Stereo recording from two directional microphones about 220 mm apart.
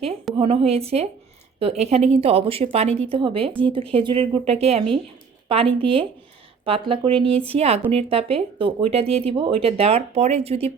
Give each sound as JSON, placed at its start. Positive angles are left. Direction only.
{"t": 0.3, "sound": "speech", "side_deg": -25}